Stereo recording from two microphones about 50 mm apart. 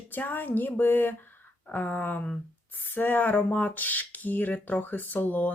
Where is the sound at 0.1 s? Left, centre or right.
Left.